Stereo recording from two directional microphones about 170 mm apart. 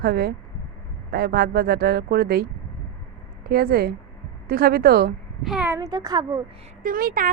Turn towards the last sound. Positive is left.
turn(degrees=-55)  # may be behind; listen again after turning